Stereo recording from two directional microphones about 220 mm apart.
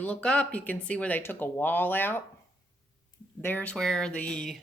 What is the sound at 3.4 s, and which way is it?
Speech, 5° left (ahead or behind).